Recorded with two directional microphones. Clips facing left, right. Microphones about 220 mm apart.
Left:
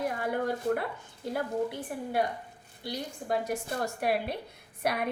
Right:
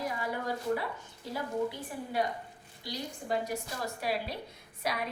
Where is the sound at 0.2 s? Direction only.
55° left (ahead or behind).